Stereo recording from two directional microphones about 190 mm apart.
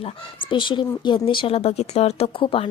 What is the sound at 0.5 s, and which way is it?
Speech, 25° left (ahead or behind).